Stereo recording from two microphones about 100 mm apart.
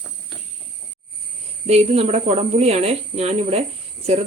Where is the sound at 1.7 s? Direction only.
90° right.